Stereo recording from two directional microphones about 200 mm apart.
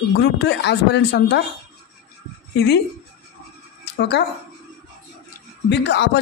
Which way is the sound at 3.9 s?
55° left (ahead or behind).